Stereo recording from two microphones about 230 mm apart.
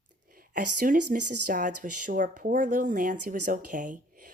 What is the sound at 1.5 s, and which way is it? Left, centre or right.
Speech, right.